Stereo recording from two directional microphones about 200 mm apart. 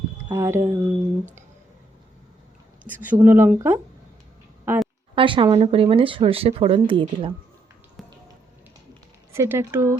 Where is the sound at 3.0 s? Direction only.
10° right (ahead or behind).